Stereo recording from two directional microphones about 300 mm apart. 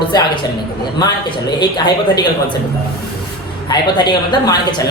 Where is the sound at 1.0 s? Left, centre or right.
Centre.